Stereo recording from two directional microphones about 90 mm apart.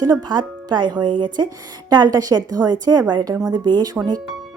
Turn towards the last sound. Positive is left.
turn(degrees=-50)  # may be behind; listen again after turning